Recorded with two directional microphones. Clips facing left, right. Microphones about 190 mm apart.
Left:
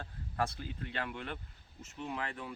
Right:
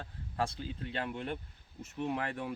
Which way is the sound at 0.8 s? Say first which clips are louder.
Right 3 dB; 30° right (ahead or behind).